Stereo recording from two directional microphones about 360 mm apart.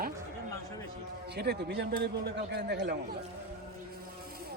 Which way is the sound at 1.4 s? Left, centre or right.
Right.